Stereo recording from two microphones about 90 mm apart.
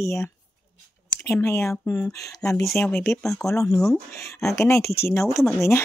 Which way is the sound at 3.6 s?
5° left (ahead or behind).